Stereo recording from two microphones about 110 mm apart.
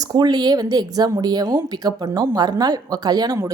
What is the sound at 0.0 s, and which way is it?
Speech, 40° right (ahead or behind).